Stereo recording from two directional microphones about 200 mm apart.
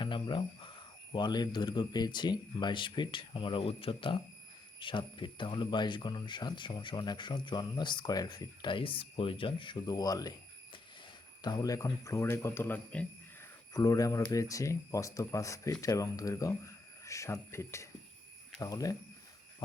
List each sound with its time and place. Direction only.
0.0 s speech: 25° left (ahead or behind)